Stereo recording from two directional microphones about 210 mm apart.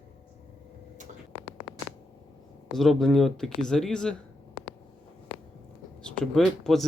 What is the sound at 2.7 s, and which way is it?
Speech, centre (ahead or behind).